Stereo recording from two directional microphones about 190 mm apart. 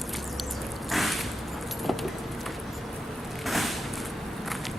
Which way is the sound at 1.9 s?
Centre (ahead or behind).